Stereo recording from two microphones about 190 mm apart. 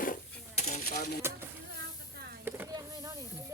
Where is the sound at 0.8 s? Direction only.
50° left (ahead or behind).